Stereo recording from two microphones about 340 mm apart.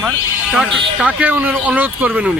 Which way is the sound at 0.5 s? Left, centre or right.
Centre.